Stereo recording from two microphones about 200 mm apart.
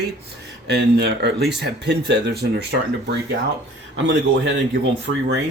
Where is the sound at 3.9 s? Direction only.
65° right (ahead or behind).